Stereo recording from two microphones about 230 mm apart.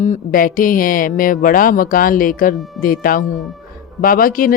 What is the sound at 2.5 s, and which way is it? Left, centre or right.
Speech, centre.